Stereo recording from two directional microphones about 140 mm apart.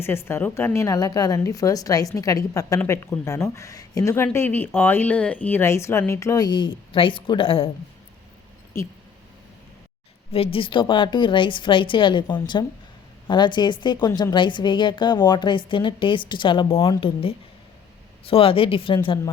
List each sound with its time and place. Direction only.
0.0 s a woman's voice: 15° left (ahead or behind); by 7.7 s 40° left (ahead or behind)
10.3 s a woman's voice: 40° left (ahead or behind)